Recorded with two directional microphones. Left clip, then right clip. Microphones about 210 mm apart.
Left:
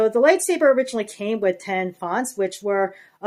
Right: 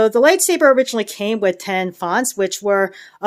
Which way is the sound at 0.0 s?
40° right (ahead or behind).